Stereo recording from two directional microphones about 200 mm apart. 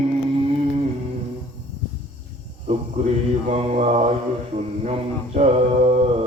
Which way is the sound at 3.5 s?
30° right (ahead or behind).